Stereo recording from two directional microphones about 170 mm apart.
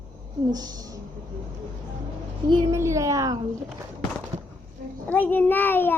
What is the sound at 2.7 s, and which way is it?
Speech, 15° right (ahead or behind).